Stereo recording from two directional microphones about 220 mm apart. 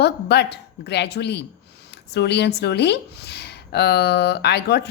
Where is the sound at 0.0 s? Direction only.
50° left (ahead or behind).